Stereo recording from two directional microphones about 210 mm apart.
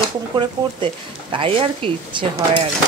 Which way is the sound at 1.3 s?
25° right (ahead or behind).